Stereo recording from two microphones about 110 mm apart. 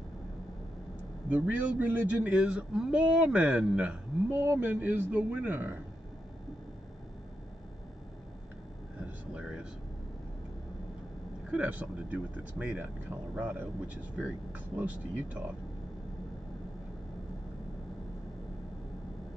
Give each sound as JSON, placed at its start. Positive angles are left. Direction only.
{"t": 1.3, "sound": "speech", "side_deg": -10}
{"t": 9.3, "sound": "a sound", "side_deg": -5}
{"t": 11.5, "sound": "speech", "side_deg": -10}